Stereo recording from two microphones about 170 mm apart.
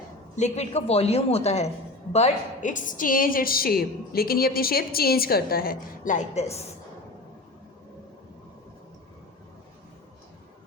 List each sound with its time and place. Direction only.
0.3 s a woman's voice: 40° left (ahead or behind)